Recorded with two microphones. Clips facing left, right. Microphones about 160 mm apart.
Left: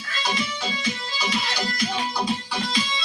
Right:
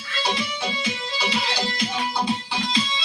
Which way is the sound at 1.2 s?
30° right (ahead or behind).